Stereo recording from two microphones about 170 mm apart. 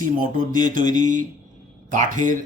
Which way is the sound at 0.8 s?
25° left (ahead or behind).